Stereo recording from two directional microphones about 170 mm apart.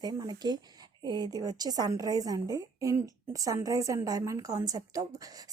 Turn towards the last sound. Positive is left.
turn(degrees=-20)  # may be behind; listen again after turning